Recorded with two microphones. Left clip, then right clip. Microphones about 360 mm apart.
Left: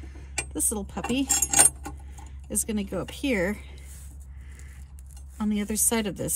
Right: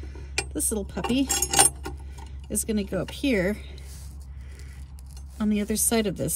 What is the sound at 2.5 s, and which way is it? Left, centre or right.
Speech, centre.